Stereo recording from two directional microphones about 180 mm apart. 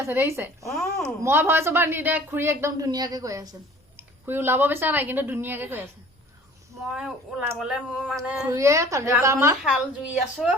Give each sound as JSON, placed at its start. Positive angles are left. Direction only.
{"t": 0.0, "sound": "speech", "side_deg": -15}
{"t": 6.9, "sound": "speech", "side_deg": -5}
{"t": 9.6, "sound": "speech", "side_deg": 0}